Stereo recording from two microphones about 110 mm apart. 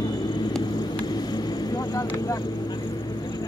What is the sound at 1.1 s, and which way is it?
Vehicle, 35° left (ahead or behind).